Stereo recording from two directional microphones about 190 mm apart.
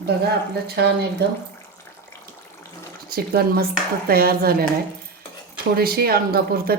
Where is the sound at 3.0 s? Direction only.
55° right (ahead or behind).